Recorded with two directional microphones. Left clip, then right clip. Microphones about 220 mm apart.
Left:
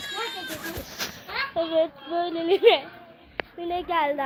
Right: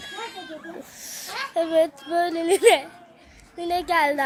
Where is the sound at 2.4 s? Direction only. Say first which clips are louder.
Even; 30° right (ahead or behind).